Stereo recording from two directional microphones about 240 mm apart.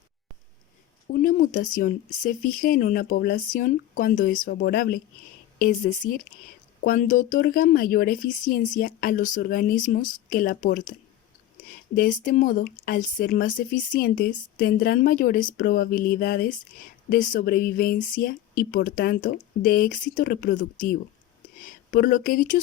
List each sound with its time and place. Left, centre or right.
1.1 s speech: left
11.9 s speech: left